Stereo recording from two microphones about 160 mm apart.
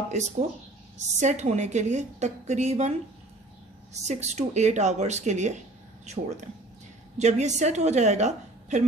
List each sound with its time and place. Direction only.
1.0 s a woman's voice: 45° right (ahead or behind)
4.0 s a woman's voice: 45° right (ahead or behind)